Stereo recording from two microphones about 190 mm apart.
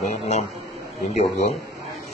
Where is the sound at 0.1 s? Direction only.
35° left (ahead or behind).